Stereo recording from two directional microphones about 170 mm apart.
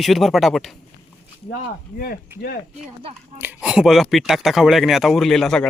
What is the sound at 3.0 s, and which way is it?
Speech, 35° right (ahead or behind).